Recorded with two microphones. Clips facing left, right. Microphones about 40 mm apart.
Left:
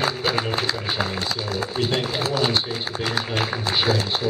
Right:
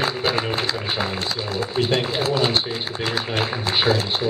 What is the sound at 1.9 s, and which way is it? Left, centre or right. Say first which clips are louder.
Speech: right 2 dB; centre.